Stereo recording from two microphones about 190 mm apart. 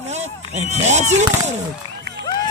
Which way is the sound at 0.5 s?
35° right (ahead or behind).